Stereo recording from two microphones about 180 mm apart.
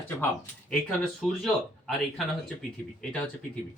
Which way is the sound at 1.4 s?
Centre (ahead or behind).